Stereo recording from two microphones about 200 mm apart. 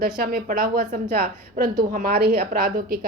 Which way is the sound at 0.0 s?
50° right (ahead or behind).